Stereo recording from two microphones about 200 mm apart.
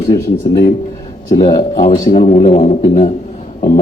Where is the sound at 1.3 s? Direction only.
20° left (ahead or behind).